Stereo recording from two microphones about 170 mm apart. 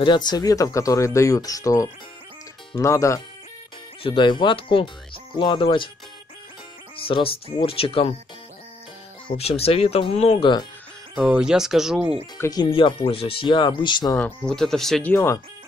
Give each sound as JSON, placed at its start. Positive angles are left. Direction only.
{"t": 0.0, "sound": "speech", "side_deg": 25}
{"t": 4.0, "sound": "speech", "side_deg": 30}
{"t": 7.0, "sound": "speech", "side_deg": 30}
{"t": 9.3, "sound": "speech", "side_deg": 35}
{"t": 11.1, "sound": "speech", "side_deg": -5}
{"t": 12.4, "sound": "speech", "side_deg": 20}
{"t": 12.6, "sound": "speech", "side_deg": 30}
{"t": 14.1, "sound": "speech", "side_deg": 5}